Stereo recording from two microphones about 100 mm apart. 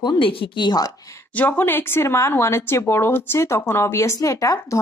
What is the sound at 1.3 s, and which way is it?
Speech, 15° left (ahead or behind).